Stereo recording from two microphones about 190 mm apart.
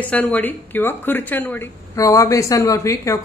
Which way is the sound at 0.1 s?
5° left (ahead or behind).